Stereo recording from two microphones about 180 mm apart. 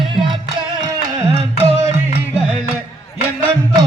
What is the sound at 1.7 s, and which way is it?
Music, 10° right (ahead or behind).